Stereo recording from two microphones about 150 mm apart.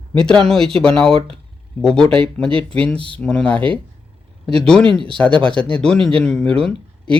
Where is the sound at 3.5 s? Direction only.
35° right (ahead or behind).